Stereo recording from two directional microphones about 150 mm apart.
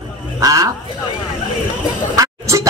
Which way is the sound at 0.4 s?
25° right (ahead or behind).